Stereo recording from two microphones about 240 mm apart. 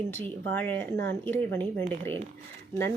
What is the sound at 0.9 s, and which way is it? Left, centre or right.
Speech, right.